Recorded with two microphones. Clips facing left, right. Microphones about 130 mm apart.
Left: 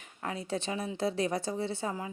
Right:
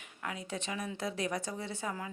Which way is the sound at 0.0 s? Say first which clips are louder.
Left 4 dB; 35° left (ahead or behind).